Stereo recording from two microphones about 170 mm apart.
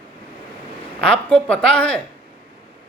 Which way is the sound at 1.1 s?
5° left (ahead or behind).